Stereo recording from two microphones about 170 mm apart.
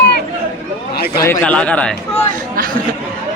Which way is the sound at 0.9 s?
65° left (ahead or behind).